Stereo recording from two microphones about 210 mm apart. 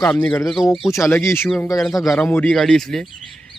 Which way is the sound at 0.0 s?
5° left (ahead or behind).